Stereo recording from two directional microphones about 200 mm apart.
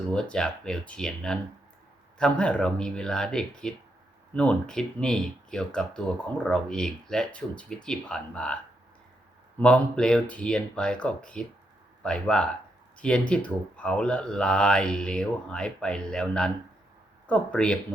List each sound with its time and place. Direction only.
0.1 s speech: 5° left (ahead or behind)
9.6 s speech: 5° left (ahead or behind)